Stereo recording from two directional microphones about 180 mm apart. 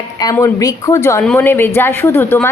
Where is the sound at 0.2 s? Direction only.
20° left (ahead or behind).